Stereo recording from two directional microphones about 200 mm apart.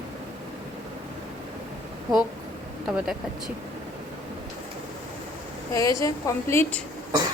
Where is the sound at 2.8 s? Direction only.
5° right (ahead or behind).